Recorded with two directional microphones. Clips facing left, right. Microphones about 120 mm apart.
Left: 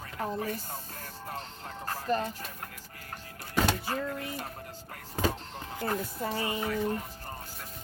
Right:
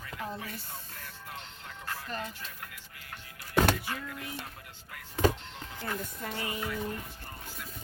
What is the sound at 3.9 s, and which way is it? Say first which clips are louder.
Speech: left 5 dB; 40° left (ahead or behind).